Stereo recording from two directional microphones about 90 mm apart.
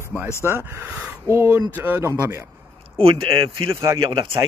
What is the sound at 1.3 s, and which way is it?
Speech, 30° right (ahead or behind).